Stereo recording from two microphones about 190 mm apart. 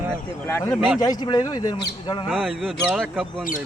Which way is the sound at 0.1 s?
10° left (ahead or behind).